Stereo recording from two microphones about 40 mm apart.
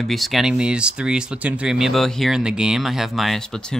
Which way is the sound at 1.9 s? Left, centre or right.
Centre.